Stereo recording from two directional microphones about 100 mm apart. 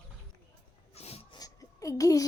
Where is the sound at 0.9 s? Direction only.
90° left.